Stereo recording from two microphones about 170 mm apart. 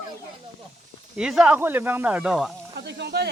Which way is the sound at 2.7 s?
85° right.